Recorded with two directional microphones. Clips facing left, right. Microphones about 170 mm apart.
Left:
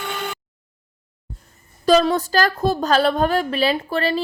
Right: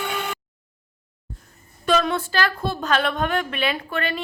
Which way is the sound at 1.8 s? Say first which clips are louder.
Left 5 dB; 35° left (ahead or behind).